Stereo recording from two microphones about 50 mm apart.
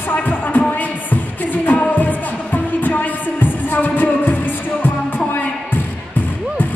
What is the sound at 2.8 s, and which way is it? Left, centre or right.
Music, left.